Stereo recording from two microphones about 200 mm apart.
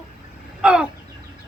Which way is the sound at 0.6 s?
5° right (ahead or behind).